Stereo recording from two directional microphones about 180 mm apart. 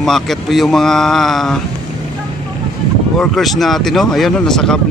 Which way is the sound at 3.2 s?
Centre (ahead or behind).